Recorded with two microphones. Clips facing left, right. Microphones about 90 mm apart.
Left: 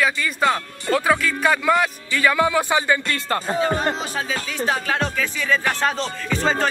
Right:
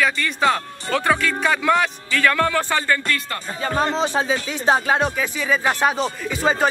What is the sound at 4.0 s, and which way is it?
Speech, 25° right (ahead or behind).